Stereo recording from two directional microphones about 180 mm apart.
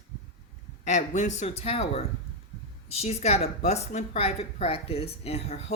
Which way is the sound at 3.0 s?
35° left (ahead or behind).